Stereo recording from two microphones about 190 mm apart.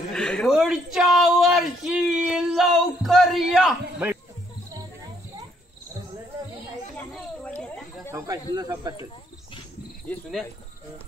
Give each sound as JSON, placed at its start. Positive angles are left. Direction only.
{"t": 0.1, "sound": "a sound", "side_deg": 5}
{"t": 7.1, "sound": "snake", "side_deg": 5}
{"t": 8.1, "sound": "snake", "side_deg": -15}
{"t": 8.5, "sound": "speech", "side_deg": -20}
{"t": 10.0, "sound": "speech", "side_deg": 5}